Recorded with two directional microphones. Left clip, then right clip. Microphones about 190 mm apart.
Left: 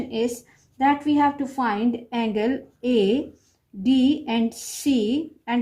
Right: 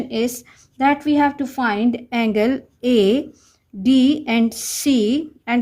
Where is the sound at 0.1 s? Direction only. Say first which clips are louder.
Right 2 dB; 55° right (ahead or behind).